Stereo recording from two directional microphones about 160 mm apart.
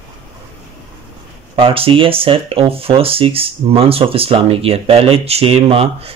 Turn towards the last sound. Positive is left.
turn(degrees=-40)  # may be behind; listen again after turning